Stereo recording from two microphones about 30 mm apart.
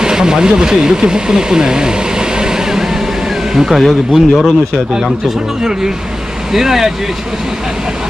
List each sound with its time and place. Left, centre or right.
0.0 s speech: right
3.5 s speech: centre
6.5 s speech: centre